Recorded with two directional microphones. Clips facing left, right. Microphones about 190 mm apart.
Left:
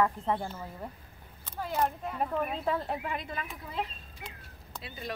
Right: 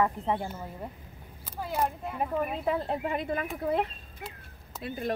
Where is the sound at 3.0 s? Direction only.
45° right (ahead or behind).